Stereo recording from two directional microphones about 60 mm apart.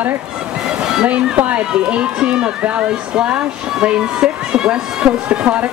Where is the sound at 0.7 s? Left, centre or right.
Centre.